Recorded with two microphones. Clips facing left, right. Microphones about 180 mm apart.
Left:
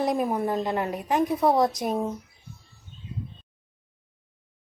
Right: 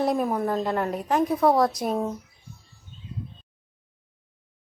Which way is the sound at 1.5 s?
20° left (ahead or behind).